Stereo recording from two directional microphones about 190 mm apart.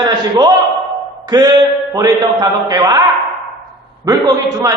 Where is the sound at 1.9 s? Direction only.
20° right (ahead or behind).